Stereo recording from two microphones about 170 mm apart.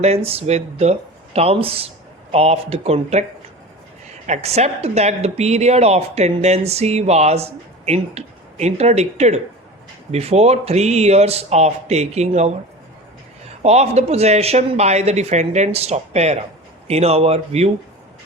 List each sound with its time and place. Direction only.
0.0 s speech: 35° right (ahead or behind)
4.3 s speech: 40° right (ahead or behind)
13.6 s speech: 40° right (ahead or behind)